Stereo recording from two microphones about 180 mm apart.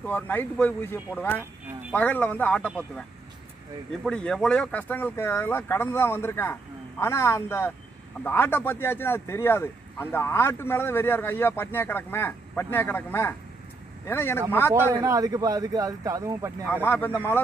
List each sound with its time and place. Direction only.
0.0 s speech: 10° left (ahead or behind)
4.0 s speech: 5° left (ahead or behind)
15.0 s speech: 20° right (ahead or behind)
16.6 s speech: 10° left (ahead or behind)